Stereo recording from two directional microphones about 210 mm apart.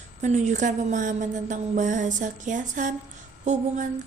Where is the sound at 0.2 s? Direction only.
35° right (ahead or behind).